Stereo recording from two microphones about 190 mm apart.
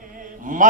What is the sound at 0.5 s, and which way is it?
Speech, 45° right (ahead or behind).